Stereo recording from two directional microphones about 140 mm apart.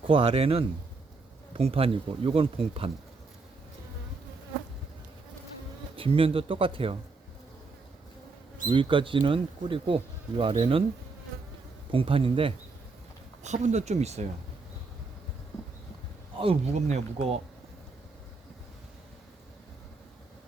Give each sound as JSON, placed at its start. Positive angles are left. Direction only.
{"t": 0.1, "sound": "speech", "side_deg": -40}
{"t": 6.0, "sound": "speech", "side_deg": -40}
{"t": 8.7, "sound": "speech", "side_deg": -35}
{"t": 11.9, "sound": "speech", "side_deg": -40}
{"t": 13.4, "sound": "speech", "side_deg": -55}
{"t": 16.4, "sound": "speech", "side_deg": -45}